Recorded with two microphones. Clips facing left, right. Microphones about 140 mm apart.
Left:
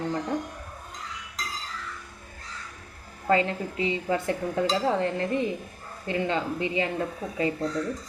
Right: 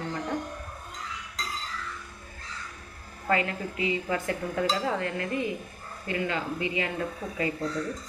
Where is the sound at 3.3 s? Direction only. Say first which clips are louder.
Left 4 dB; 30° left (ahead or behind).